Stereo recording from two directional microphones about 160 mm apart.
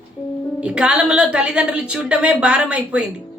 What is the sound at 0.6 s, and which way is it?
Speech, 5° right (ahead or behind).